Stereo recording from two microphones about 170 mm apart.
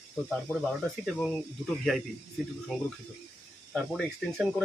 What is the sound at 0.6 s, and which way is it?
Speech, 5° left (ahead or behind).